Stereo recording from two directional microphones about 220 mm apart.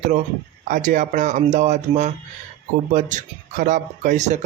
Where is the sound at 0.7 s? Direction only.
35° right (ahead or behind).